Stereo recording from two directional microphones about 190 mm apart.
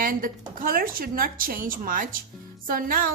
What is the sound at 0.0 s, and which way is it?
A woman's voice, 45° right (ahead or behind).